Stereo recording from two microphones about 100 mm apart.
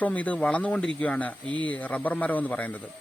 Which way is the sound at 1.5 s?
55° right (ahead or behind).